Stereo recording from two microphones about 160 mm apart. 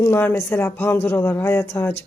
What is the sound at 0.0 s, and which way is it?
Speech, 15° left (ahead or behind).